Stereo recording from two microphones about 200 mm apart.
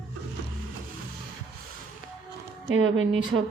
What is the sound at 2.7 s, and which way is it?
Speech, 85° right.